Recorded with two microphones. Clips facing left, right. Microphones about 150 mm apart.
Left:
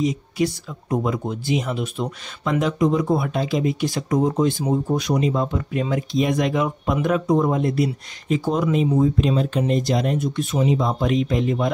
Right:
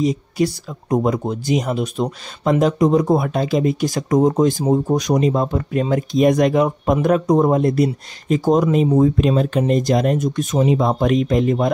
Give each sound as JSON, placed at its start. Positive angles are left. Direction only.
{"t": 0.0, "sound": "speech", "side_deg": -35}
{"t": 8.9, "sound": "speech", "side_deg": -50}